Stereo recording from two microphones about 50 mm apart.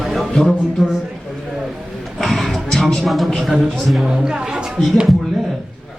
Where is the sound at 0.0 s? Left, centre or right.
Centre.